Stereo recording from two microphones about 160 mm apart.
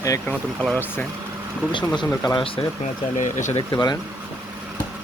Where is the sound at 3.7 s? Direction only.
20° left (ahead or behind).